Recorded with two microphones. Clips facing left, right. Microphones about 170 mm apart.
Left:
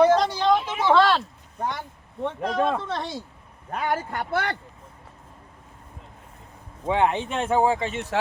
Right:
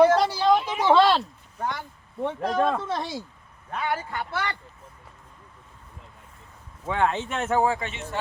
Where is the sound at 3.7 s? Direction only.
40° left (ahead or behind).